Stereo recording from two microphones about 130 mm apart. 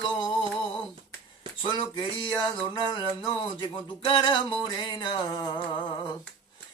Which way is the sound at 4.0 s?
40° left (ahead or behind).